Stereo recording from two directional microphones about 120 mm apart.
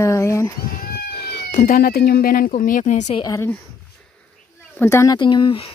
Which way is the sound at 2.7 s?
85° left.